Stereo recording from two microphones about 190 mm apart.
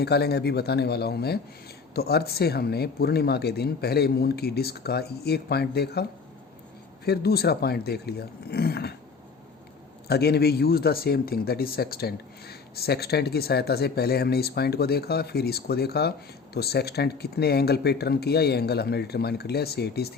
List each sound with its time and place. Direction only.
0.0 s speech: 60° left (ahead or behind)
10.1 s speech: 60° left (ahead or behind)